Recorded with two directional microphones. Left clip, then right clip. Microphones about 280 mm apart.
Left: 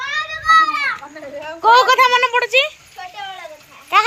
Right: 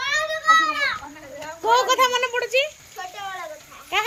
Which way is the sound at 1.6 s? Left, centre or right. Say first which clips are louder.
Left 7 dB; centre.